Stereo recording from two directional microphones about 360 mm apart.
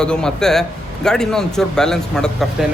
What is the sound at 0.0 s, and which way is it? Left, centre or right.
Speech, centre.